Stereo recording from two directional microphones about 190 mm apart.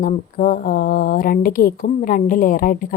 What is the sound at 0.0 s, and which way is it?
A woman's voice, 45° left (ahead or behind).